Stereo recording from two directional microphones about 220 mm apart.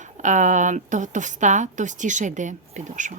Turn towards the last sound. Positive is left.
turn(degrees=-35)  # may be behind; listen again after turning